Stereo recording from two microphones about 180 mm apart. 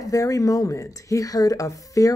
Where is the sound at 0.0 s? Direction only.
20° left (ahead or behind).